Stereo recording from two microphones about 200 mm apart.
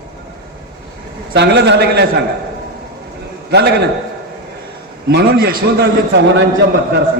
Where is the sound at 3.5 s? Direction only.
55° right (ahead or behind).